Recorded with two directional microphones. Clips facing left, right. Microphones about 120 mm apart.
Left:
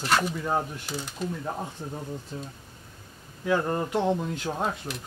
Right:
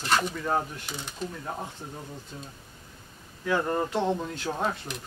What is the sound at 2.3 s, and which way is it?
Speech, 30° left (ahead or behind).